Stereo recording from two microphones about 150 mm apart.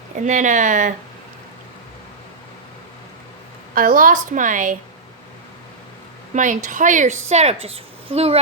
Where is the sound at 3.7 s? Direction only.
65° right (ahead or behind).